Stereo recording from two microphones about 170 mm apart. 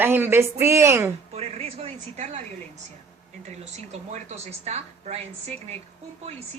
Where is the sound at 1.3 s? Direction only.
35° right (ahead or behind).